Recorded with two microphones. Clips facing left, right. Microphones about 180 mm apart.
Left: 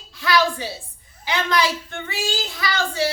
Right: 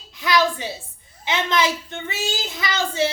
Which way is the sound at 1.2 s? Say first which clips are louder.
Even; 20° right (ahead or behind).